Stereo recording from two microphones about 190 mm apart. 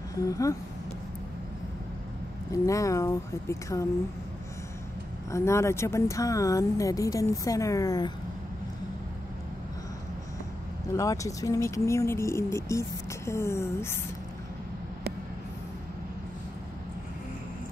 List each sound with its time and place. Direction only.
0.1 s speech: 15° left (ahead or behind)
2.5 s speech: 15° left (ahead or behind)
5.3 s speech: 15° left (ahead or behind)
10.9 s speech: 15° left (ahead or behind)